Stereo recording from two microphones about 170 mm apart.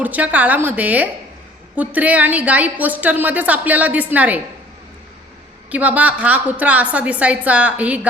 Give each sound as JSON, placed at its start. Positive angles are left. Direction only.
{"t": 0.0, "sound": "a woman's voice", "side_deg": -10}
{"t": 5.7, "sound": "a woman's voice", "side_deg": -10}